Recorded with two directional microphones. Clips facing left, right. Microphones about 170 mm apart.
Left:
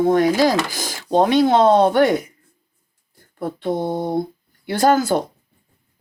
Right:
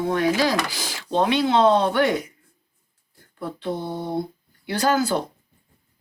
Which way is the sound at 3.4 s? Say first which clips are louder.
Left 6 dB; 45° left (ahead or behind).